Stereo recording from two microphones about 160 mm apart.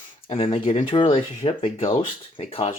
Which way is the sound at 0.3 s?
35° left (ahead or behind).